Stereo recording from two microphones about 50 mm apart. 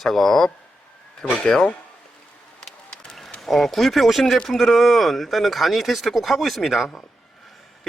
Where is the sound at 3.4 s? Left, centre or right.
Centre.